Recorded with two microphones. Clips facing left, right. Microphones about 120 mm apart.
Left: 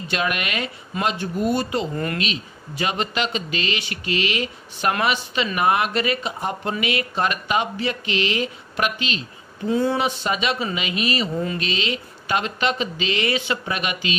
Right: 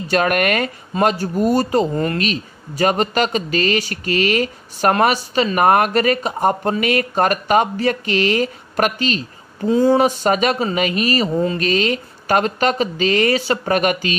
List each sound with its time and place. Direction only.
0.1 s speech: 50° right (ahead or behind)